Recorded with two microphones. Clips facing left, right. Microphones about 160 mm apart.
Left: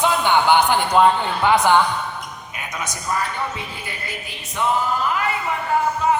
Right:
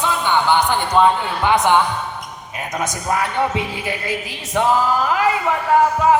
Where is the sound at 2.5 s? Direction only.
40° right (ahead or behind); by 6.2 s 90° right.